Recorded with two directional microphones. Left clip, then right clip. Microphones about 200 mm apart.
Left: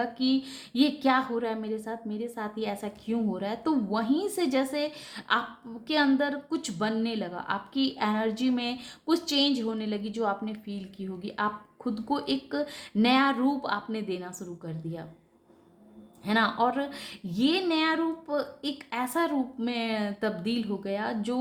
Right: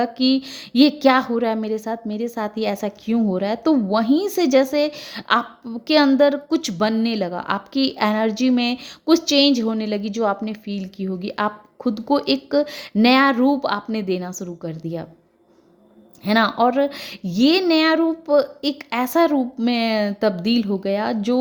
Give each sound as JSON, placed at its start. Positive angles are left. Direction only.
{"t": 0.0, "sound": "a woman's voice", "side_deg": -40}
{"t": 16.2, "sound": "a woman's voice", "side_deg": -40}